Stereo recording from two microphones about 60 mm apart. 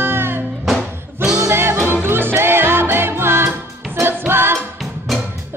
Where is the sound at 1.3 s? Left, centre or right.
Right.